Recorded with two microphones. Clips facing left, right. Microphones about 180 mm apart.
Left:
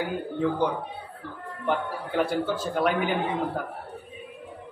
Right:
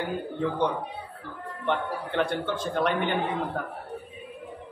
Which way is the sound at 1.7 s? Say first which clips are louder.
Left 1 dB; 5° left (ahead or behind).